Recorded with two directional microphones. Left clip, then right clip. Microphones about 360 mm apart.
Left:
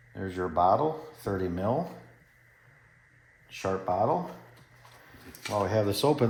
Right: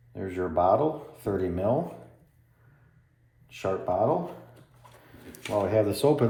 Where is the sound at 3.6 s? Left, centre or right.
Left.